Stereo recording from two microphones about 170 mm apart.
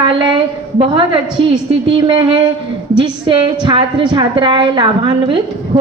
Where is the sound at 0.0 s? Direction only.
30° right (ahead or behind).